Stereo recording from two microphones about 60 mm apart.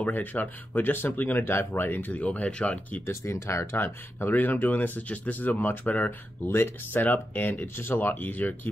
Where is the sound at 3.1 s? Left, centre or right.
Left.